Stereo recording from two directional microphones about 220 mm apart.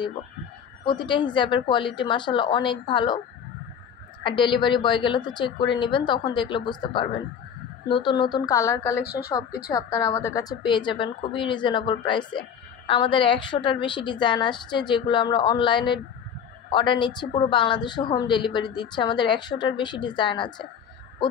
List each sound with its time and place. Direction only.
0.8 s a woman's voice: 20° left (ahead or behind)
4.2 s a woman's voice: 20° left (ahead or behind)